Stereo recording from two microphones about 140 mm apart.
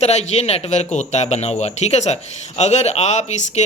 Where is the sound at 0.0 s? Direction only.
50° left (ahead or behind).